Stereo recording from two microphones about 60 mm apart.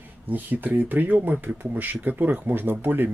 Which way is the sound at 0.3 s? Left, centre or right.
Right.